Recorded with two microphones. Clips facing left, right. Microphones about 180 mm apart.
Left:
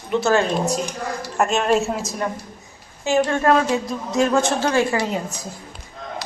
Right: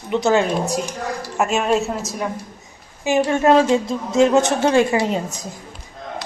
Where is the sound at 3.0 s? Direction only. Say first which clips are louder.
Right 2 dB; 15° right (ahead or behind).